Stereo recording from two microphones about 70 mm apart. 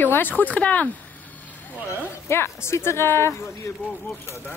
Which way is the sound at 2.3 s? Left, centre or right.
Left.